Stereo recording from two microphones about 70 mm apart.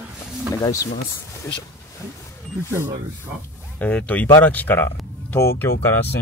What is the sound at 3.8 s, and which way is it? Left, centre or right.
Speech, left.